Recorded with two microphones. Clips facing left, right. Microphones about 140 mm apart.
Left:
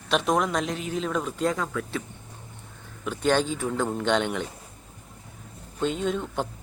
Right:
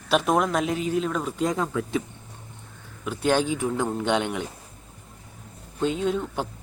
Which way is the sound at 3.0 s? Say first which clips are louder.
Right 1 dB; 10° right (ahead or behind).